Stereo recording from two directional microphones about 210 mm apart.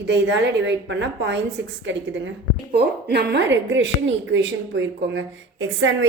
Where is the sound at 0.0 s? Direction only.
55° right (ahead or behind).